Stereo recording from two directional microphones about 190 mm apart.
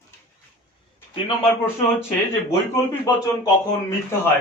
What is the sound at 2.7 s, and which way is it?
Speech, 15° left (ahead or behind).